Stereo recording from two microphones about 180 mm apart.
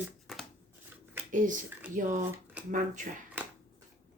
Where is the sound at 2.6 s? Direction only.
5° right (ahead or behind).